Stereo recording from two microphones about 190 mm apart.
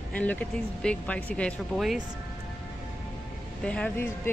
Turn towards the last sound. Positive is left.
turn(degrees=10)  # may be behind; listen again after turning